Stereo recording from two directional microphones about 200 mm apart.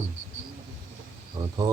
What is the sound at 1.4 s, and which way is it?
Speech, 20° right (ahead or behind).